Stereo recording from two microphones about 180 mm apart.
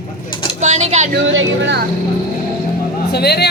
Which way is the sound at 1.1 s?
75° right (ahead or behind).